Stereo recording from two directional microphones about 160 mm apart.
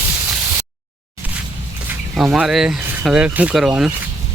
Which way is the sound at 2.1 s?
5° right (ahead or behind).